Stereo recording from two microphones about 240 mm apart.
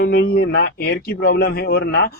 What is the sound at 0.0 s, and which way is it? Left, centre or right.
Speech, left.